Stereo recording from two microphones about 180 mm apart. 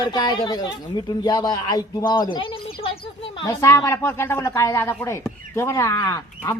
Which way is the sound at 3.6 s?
15° left (ahead or behind).